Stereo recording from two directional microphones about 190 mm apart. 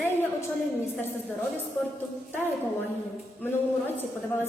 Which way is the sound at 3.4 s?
10° left (ahead or behind).